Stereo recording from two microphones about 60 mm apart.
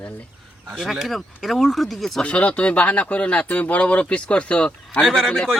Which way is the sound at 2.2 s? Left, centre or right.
Left.